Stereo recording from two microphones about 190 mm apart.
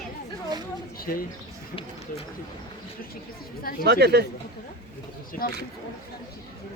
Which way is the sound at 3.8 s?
60° right (ahead or behind).